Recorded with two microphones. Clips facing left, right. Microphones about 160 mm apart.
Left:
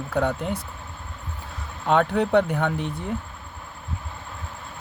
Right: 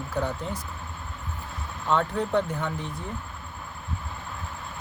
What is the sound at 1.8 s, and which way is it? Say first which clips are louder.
Speech: left 5 dB; 70° left (ahead or behind).